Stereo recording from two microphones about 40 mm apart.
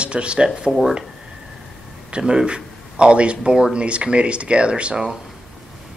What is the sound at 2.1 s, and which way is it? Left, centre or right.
Speech, right.